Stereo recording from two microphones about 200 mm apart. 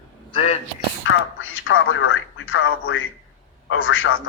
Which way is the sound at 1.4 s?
80° left.